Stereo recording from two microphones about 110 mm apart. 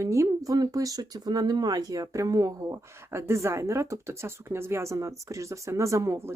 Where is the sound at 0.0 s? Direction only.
30° right (ahead or behind).